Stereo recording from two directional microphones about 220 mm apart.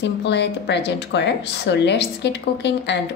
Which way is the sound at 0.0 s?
55° left (ahead or behind).